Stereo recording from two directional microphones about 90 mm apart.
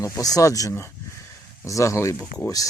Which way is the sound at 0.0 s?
40° left (ahead or behind).